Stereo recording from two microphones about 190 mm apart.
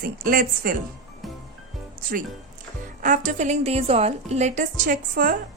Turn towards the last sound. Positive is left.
turn(degrees=-45)  # may be behind; listen again after turning